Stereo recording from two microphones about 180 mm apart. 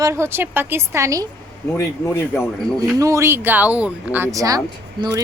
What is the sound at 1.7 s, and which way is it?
Speech, 15° left (ahead or behind).